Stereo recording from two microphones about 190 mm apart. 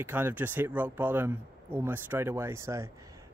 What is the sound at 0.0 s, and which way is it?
Speech, 10° right (ahead or behind).